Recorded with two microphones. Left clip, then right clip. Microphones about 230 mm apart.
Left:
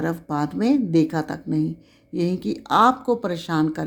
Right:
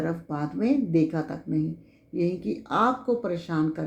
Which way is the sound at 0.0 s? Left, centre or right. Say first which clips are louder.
Left 5 dB; left.